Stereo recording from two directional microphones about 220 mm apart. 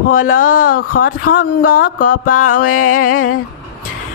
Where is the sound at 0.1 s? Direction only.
40° left (ahead or behind).